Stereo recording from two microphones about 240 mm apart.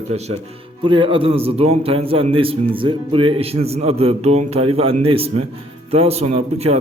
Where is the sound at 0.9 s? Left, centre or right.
Right.